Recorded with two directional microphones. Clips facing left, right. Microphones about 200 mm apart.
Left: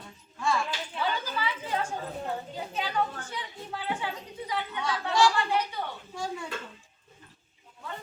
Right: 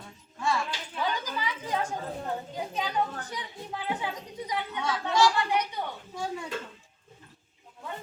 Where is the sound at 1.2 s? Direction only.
15° right (ahead or behind).